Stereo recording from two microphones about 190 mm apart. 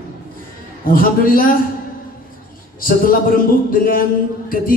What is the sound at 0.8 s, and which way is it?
Speech, 50° left (ahead or behind).